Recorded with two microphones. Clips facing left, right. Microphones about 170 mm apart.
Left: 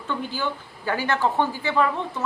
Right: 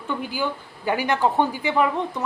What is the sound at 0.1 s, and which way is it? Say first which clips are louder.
A woman's voice: right 1 dB; 10° right (ahead or behind).